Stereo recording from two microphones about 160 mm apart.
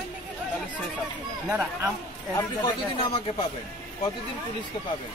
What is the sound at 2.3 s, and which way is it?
Speech, 25° left (ahead or behind).